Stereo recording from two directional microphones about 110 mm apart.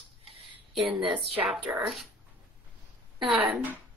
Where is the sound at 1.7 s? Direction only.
20° right (ahead or behind).